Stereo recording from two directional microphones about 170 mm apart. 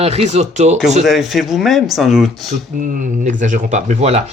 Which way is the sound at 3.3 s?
50° right (ahead or behind).